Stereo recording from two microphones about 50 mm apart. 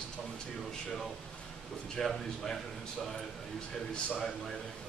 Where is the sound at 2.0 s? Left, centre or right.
Centre.